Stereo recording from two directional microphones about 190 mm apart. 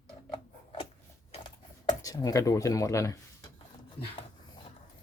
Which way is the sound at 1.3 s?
25° left (ahead or behind).